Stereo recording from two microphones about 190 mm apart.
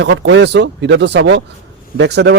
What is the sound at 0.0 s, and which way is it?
A man's voice, 70° right (ahead or behind).